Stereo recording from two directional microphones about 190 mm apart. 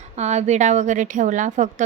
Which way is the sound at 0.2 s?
35° right (ahead or behind).